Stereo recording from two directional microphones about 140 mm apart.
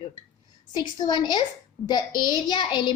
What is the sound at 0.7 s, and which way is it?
A child's voice, 30° left (ahead or behind).